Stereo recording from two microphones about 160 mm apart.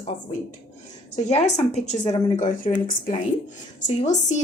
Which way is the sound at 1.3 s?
45° left (ahead or behind).